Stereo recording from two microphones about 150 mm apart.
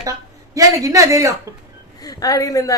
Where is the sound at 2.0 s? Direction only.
25° left (ahead or behind).